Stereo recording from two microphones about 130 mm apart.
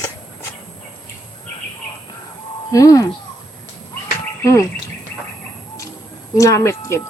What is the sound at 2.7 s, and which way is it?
Speech, 25° left (ahead or behind).